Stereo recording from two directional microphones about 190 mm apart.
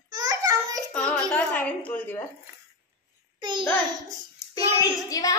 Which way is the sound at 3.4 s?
25° right (ahead or behind).